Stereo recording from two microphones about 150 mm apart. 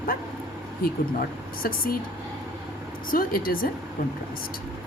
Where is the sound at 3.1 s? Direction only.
70° left (ahead or behind).